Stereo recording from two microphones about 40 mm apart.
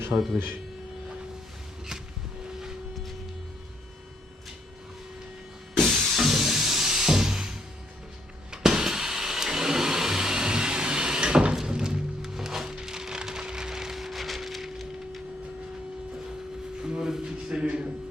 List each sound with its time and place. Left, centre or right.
0.1 s speech: centre
5.8 s music: centre
8.4 s vehicle: centre
11.5 s music: centre
12.3 s splinter: centre
16.8 s a sound: centre